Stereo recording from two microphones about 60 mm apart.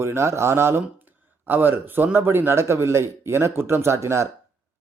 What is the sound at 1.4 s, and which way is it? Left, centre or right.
Speech, right.